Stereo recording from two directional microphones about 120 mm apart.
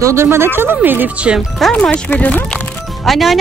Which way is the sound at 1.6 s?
5° left (ahead or behind).